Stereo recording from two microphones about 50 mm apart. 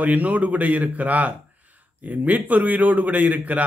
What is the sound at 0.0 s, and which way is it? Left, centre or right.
A man's voice, right.